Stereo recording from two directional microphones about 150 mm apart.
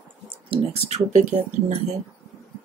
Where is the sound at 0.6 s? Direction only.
45° right (ahead or behind).